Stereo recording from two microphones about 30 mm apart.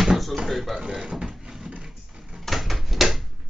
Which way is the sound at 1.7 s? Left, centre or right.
Centre.